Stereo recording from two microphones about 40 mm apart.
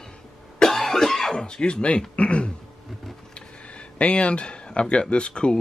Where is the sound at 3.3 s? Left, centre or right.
Left.